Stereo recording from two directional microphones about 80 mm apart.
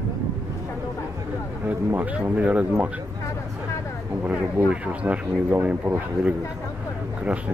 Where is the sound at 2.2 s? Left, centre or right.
Centre.